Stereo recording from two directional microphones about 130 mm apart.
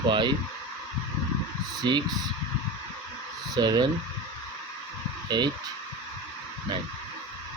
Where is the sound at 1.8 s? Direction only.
35° right (ahead or behind).